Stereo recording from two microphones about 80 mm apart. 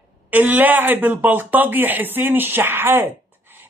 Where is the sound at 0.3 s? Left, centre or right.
Right.